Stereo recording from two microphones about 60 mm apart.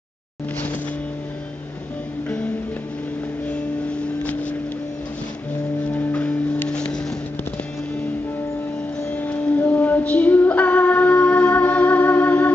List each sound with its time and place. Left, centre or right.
2.2 s music: left
4.2 s vehicle: left
5.9 s music: left
9.1 s music: left